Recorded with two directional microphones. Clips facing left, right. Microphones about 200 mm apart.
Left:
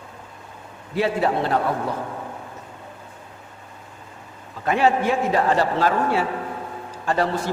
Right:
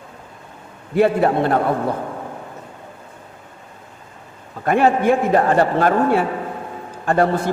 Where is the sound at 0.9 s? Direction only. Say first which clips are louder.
Right 6 dB; 55° right (ahead or behind).